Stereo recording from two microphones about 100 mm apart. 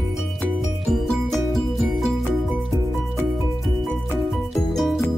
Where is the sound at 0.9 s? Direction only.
Centre (ahead or behind).